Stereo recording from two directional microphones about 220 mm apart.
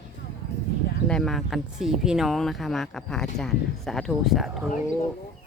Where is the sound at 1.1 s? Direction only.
Centre (ahead or behind).